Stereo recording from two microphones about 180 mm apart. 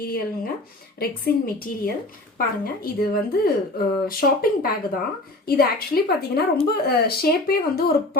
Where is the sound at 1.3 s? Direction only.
55° left (ahead or behind).